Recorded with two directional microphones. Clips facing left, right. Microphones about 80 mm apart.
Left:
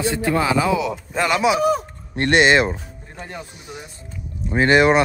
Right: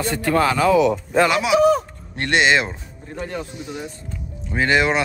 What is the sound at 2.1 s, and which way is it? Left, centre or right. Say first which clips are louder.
Speech: left 3 dB; left.